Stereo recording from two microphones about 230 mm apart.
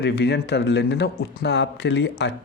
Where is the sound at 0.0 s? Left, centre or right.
Left.